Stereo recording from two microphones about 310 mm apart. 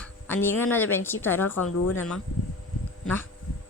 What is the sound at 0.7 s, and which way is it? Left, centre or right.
Speech, centre.